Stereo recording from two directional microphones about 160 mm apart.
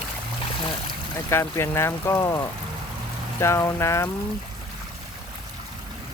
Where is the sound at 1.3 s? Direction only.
15° left (ahead or behind).